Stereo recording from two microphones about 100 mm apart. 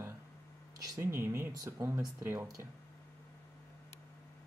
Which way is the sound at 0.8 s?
25° right (ahead or behind).